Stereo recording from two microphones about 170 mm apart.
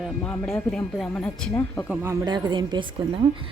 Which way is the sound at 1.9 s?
15° right (ahead or behind).